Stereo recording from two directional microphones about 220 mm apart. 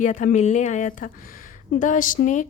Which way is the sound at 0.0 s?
35° left (ahead or behind).